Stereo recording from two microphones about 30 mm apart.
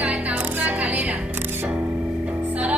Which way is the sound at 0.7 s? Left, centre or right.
Right.